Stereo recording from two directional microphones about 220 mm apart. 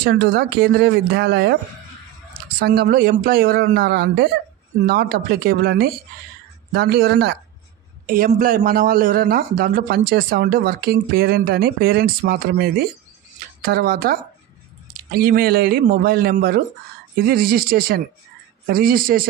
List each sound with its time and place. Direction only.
0.0 s a man's voice: 45° right (ahead or behind)